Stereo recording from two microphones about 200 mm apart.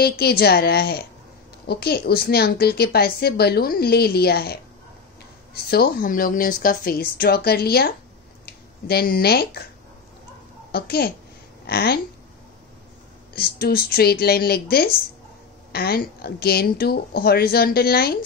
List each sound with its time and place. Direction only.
0.0 s a woman's voice: 50° left (ahead or behind)
10.7 s a child's voice: 50° left (ahead or behind)
13.3 s a woman's voice: 50° left (ahead or behind)